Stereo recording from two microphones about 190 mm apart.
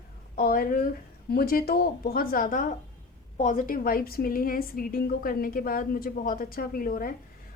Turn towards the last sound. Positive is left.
turn(degrees=50)  # may be behind; listen again after turning